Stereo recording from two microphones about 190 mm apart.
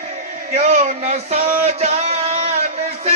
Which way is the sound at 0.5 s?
40° right (ahead or behind).